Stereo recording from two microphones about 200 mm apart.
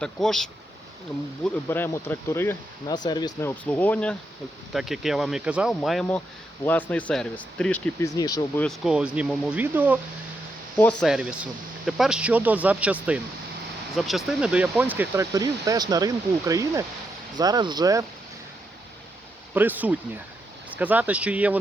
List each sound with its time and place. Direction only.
0.0 s speech: centre (ahead or behind)
1.6 s speech: 10° left (ahead or behind)
3.5 s speech: 5° left (ahead or behind)
8.1 s speech: 20° left (ahead or behind)
8.6 s speech: centre (ahead or behind)
10.8 s speech: 5° left (ahead or behind); by 18.0 s 20° right (ahead or behind)
19.5 s speech: 10° right (ahead or behind)